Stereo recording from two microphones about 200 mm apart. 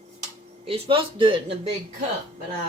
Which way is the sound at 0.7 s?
25° right (ahead or behind).